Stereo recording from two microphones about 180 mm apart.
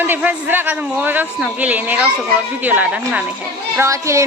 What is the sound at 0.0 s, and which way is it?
Speech, 10° right (ahead or behind).